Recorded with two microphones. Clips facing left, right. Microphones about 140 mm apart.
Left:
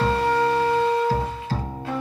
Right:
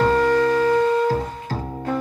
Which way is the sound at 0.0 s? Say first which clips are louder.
Right 4 dB; 45° right (ahead or behind).